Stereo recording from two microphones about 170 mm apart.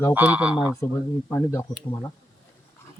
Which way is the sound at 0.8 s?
15° left (ahead or behind).